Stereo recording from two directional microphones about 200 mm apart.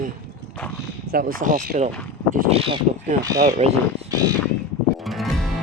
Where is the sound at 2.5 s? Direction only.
30° right (ahead or behind).